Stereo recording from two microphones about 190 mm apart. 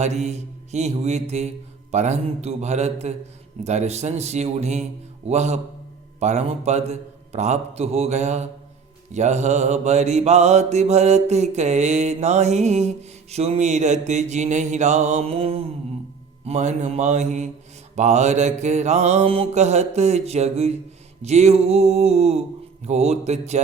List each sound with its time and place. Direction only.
0.0 s mantra: 35° right (ahead or behind)